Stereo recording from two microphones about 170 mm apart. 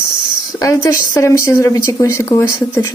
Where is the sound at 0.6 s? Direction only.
20° left (ahead or behind).